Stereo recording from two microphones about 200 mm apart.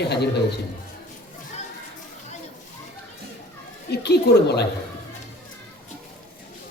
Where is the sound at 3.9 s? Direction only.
55° left (ahead or behind).